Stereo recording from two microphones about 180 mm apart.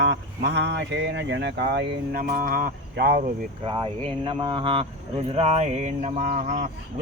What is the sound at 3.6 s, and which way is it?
Speech, 25° right (ahead or behind).